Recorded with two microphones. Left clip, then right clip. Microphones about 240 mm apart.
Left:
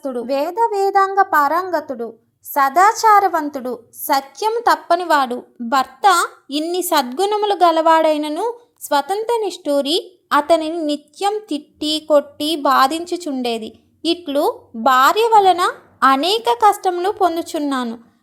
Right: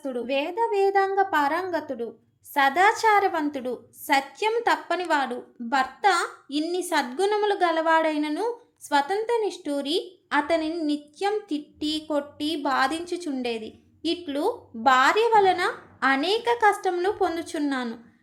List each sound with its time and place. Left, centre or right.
0.0 s a woman's voice: centre